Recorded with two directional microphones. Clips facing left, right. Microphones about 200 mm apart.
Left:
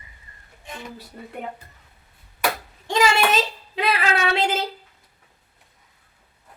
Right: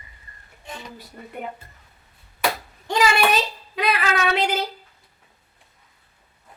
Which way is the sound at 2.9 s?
25° left (ahead or behind).